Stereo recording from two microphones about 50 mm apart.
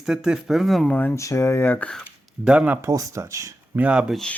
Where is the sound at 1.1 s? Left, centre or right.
Left.